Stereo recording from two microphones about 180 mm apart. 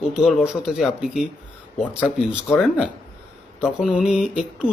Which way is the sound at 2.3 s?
Centre (ahead or behind).